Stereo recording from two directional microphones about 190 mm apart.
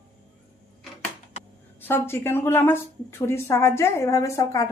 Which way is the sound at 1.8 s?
10° left (ahead or behind).